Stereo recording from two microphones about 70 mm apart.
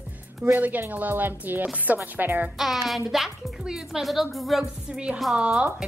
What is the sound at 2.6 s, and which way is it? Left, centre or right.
A woman's voice, centre.